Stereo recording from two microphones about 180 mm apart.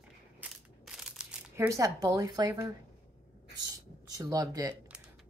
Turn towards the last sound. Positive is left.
turn(degrees=-20)  # may be behind; listen again after turning